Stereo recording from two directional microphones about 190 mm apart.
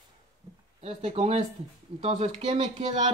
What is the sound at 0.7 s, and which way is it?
Speech, 30° right (ahead or behind).